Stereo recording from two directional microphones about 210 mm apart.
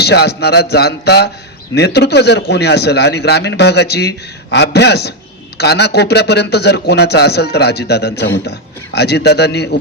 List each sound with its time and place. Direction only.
0.0 s a man's voice: 50° left (ahead or behind)